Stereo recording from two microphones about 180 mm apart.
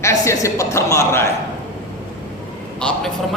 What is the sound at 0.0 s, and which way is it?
A woman's voice, 15° left (ahead or behind).